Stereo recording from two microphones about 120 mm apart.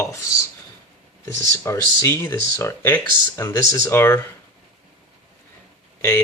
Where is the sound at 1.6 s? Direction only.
25° left (ahead or behind).